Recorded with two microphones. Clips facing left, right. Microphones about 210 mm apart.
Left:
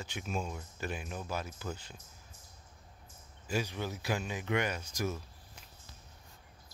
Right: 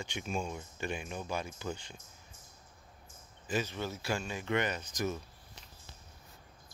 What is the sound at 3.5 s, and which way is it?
Speech, 10° left (ahead or behind).